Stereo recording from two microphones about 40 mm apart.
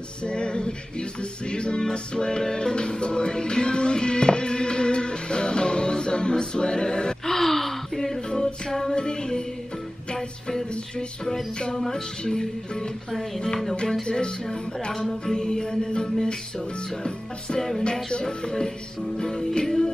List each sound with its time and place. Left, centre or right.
0.3 s male singing: left
1.5 s music: left
7.2 s gasp: centre
8.3 s music: left
11.8 s music: centre
14.0 s music: left
14.9 s music: centre